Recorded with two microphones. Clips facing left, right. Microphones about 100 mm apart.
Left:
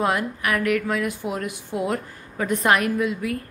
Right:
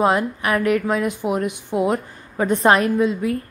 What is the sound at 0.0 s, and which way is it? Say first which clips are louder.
A woman's voice: right 5 dB; 25° right (ahead or behind).